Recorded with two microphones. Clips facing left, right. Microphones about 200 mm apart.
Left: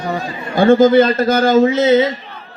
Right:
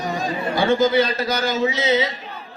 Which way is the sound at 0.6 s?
50° left (ahead or behind).